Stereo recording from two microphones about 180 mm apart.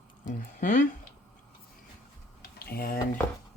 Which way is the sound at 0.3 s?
45° left (ahead or behind).